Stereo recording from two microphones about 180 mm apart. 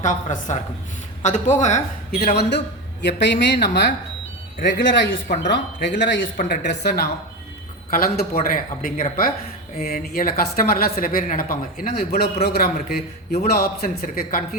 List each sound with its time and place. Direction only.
0.0 s speech: 45° left (ahead or behind)
3.0 s speech: 70° left (ahead or behind)
4.6 s speech: 85° left
5.5 s speech: 75° left (ahead or behind)
6.3 s speech: 50° left (ahead or behind)
6.6 s a woman's voice: 65° left (ahead or behind)